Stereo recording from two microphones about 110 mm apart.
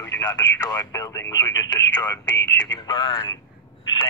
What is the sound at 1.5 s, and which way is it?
Speech, 40° left (ahead or behind).